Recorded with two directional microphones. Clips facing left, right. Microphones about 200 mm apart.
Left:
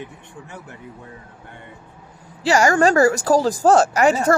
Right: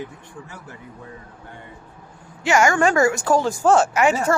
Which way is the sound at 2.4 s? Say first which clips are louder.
Left 2 dB; 35° left (ahead or behind).